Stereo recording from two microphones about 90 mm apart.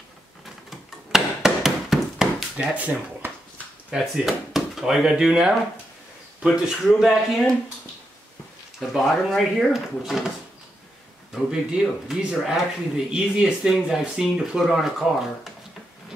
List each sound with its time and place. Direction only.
0.7 s chop: 5° right (ahead or behind)
2.5 s speech: 15° right (ahead or behind); by 7.5 s centre (ahead or behind)
8.7 s speech: centre (ahead or behind)
11.3 s speech: 5° right (ahead or behind)